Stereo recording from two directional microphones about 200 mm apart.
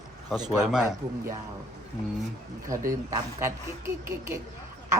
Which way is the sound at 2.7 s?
15° right (ahead or behind).